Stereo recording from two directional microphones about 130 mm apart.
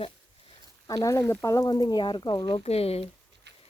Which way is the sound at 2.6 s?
50° left (ahead or behind).